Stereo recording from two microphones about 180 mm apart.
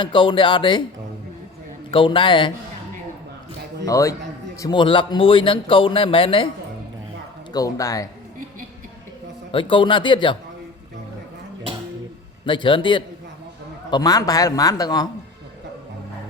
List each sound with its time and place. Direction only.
0.0 s speech: 25° left (ahead or behind)
1.9 s speech: 30° left (ahead or behind)
3.8 s a man's voice: 20° left (ahead or behind)
7.5 s speech: 20° left (ahead or behind)
9.5 s speech: 25° left (ahead or behind)
12.5 s speech: 25° left (ahead or behind)